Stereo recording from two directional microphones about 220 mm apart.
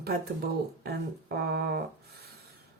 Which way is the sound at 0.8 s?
45° right (ahead or behind).